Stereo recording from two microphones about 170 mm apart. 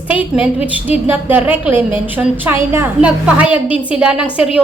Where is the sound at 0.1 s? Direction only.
10° right (ahead or behind).